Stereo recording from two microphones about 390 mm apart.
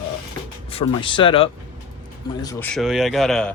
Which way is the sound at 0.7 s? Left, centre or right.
Centre.